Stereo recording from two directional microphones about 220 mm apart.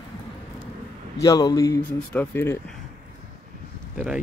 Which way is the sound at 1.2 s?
15° left (ahead or behind).